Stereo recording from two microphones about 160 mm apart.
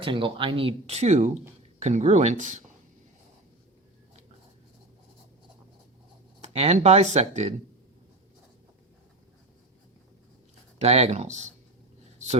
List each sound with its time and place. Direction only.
0.0 s speech: 30° right (ahead or behind); by 2.6 s 45° right (ahead or behind)
6.4 s speech: 45° right (ahead or behind)
10.8 s speech: 40° right (ahead or behind)